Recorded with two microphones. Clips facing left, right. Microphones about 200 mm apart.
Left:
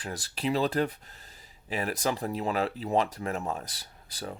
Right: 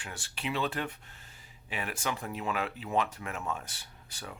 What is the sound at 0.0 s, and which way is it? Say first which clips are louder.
Speech: left 7 dB; 35° left (ahead or behind).